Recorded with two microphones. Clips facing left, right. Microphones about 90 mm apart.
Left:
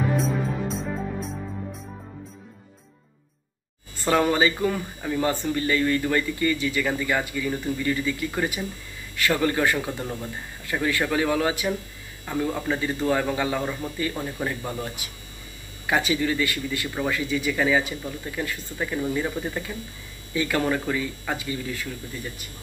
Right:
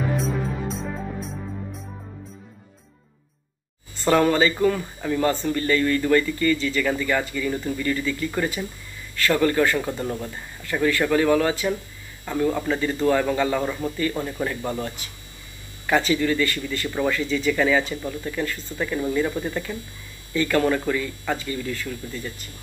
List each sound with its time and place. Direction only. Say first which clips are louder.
0.2 s music: even; centre (ahead or behind)
4.0 s speech: right 2 dB; 10° left (ahead or behind)